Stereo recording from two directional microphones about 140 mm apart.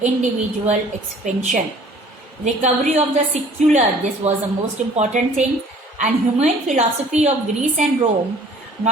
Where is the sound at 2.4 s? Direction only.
60° right (ahead or behind).